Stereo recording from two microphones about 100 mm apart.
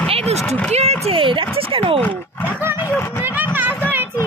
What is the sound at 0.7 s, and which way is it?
Speech, 90° right.